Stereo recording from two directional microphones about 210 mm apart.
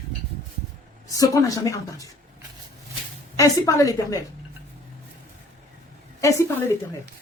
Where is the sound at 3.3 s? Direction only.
15° left (ahead or behind).